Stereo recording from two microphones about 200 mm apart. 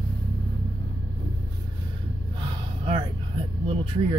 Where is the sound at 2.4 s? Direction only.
25° right (ahead or behind).